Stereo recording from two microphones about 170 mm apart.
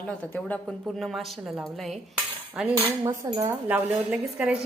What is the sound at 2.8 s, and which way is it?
Dishes, 20° right (ahead or behind).